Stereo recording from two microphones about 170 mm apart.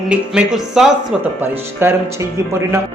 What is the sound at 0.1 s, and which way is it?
Speech, 5° right (ahead or behind).